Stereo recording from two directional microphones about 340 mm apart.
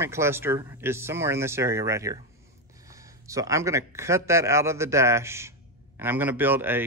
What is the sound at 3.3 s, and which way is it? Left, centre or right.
Speech, centre.